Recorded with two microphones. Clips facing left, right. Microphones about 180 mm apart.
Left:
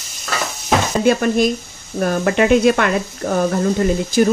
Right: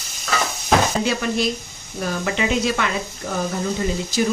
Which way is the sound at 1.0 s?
50° left (ahead or behind).